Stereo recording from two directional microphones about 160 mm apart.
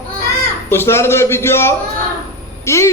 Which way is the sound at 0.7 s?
15° left (ahead or behind).